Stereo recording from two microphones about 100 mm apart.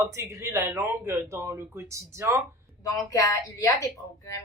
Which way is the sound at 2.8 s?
35° left (ahead or behind).